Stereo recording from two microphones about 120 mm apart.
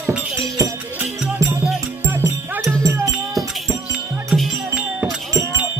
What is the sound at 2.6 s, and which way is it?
Music, 25° right (ahead or behind).